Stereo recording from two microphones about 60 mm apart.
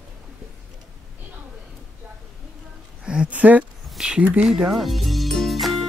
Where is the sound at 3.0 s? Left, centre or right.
Centre.